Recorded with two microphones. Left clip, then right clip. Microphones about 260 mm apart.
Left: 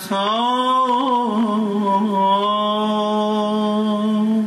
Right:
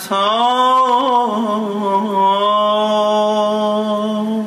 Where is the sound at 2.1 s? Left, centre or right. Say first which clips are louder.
Right 5 dB; centre.